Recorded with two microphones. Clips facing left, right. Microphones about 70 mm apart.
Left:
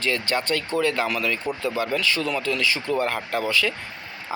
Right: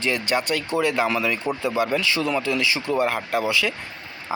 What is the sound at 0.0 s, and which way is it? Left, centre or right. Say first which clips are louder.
Speech: right 1 dB; centre.